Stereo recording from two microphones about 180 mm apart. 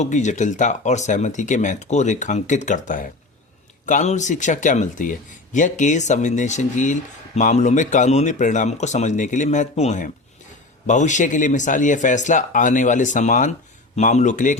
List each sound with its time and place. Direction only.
0.0 s speech: 40° left (ahead or behind)